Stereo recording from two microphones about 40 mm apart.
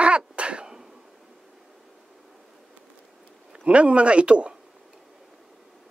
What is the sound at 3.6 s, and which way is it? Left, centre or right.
Speech, right.